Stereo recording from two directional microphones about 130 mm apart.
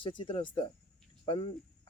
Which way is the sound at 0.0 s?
40° left (ahead or behind).